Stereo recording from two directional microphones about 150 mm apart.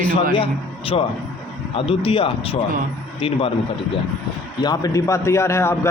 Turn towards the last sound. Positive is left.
turn(degrees=15)  # may be behind; listen again after turning